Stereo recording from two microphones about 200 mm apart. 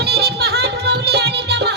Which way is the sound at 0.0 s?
55° right (ahead or behind).